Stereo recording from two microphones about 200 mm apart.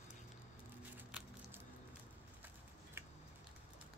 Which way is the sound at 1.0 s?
10° right (ahead or behind).